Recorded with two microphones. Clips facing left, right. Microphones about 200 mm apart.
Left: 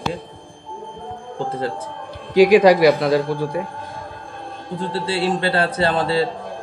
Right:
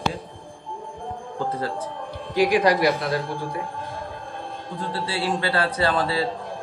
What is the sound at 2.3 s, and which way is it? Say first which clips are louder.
Speech: left 8 dB; 90° left.